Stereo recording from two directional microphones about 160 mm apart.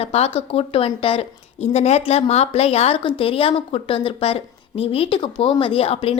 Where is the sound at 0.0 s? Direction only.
40° left (ahead or behind).